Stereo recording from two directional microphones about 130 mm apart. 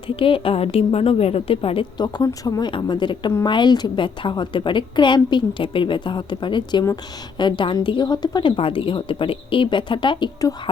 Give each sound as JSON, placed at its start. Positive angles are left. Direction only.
{"t": 0.2, "sound": "a woman's voice", "side_deg": 45}
{"t": 2.0, "sound": "a woman's voice", "side_deg": 30}